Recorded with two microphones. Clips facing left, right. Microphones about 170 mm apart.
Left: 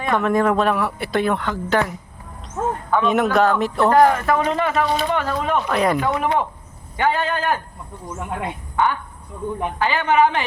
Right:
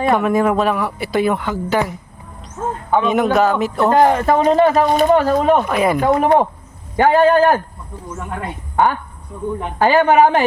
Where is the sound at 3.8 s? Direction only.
25° right (ahead or behind); by 5.6 s 40° right (ahead or behind).